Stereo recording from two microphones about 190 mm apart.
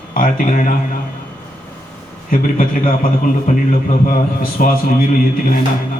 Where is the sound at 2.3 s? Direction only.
45° left (ahead or behind).